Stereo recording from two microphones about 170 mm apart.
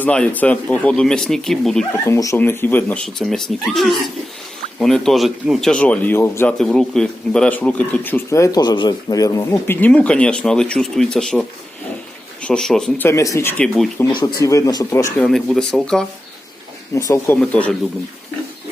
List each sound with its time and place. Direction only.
0.0 s speech: 10° left (ahead or behind)
1.9 s speech: 15° left (ahead or behind)
6.6 s speech: 5° left (ahead or behind)
13.1 s speech: 20° left (ahead or behind)
15.2 s speech: centre (ahead or behind)
16.9 s speech: 20° left (ahead or behind)
17.4 s speech: 5° left (ahead or behind)